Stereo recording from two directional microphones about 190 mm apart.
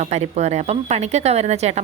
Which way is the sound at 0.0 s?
35° right (ahead or behind).